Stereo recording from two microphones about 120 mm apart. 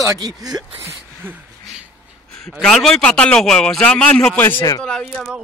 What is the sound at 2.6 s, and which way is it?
A man's voice, 5° left (ahead or behind).